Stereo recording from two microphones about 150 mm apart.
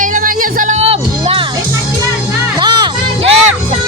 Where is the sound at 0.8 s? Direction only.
40° right (ahead or behind).